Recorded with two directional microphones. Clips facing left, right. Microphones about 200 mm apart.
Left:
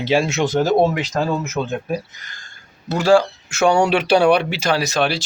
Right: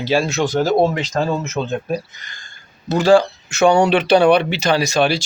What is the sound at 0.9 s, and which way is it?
Speech, 10° left (ahead or behind).